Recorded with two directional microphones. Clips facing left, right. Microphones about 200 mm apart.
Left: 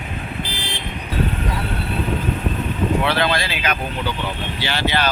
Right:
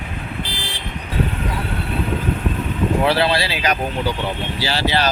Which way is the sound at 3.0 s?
35° right (ahead or behind).